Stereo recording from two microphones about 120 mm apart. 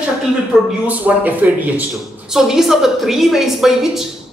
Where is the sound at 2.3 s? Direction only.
5° right (ahead or behind).